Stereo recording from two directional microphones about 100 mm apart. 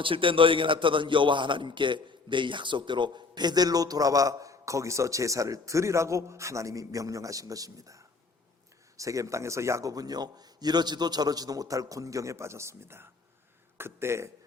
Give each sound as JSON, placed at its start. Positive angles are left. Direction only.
{"t": 0.0, "sound": "a man's voice", "side_deg": -60}